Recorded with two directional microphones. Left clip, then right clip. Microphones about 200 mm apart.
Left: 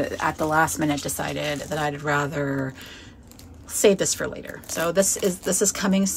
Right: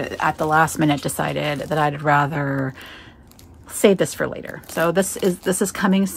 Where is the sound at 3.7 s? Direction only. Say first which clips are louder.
Right 2 dB; 35° right (ahead or behind).